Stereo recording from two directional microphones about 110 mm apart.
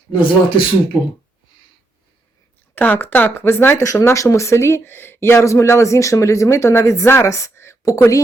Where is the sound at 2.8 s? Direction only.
15° left (ahead or behind).